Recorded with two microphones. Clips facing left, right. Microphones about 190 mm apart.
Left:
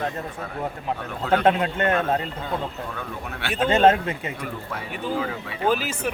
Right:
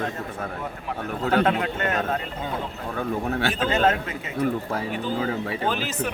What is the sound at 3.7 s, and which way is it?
Speech, 25° left (ahead or behind).